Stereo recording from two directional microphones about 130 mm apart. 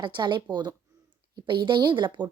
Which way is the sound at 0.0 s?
35° right (ahead or behind).